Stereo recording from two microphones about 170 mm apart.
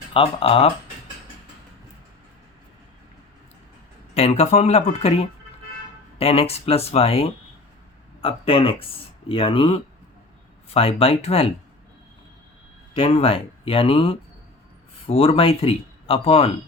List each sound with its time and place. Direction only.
0.1 s speech: 35° left (ahead or behind)
4.1 s speech: 40° left (ahead or behind)
12.9 s speech: 35° left (ahead or behind)